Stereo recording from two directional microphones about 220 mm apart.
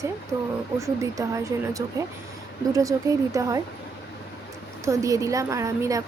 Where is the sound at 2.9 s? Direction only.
15° right (ahead or behind).